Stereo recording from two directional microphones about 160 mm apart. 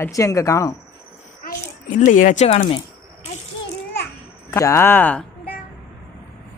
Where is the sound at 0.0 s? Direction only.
20° left (ahead or behind).